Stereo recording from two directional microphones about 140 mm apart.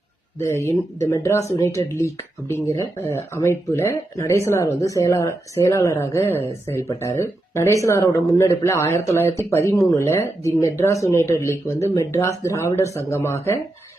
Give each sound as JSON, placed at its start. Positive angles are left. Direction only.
{"t": 0.3, "sound": "speech", "side_deg": 20}